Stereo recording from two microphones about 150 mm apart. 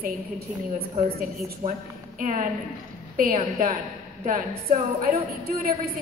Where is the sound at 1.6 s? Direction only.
60° right (ahead or behind).